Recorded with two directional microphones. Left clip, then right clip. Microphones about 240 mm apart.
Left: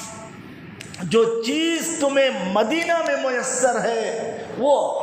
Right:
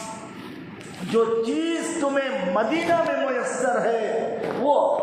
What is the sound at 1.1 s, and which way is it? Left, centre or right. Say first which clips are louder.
A man's voice: left 3 dB; left.